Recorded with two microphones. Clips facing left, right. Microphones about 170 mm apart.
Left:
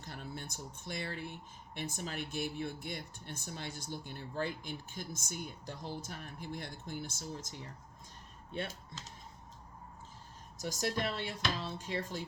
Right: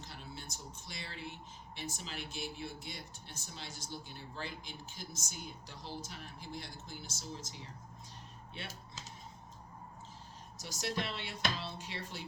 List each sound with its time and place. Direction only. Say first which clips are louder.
0.0 s speech: left 4 dB; 50° left (ahead or behind)
10.6 s speech: left 4 dB; 45° left (ahead or behind)